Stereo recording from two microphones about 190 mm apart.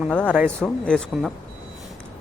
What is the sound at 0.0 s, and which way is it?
Speech, 5° left (ahead or behind).